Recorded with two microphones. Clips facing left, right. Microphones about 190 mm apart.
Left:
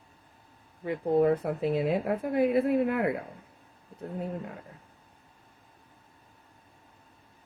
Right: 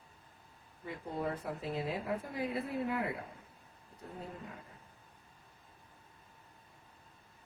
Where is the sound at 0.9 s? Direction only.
65° left (ahead or behind).